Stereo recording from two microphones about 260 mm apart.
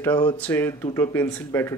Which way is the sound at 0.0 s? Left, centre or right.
Centre.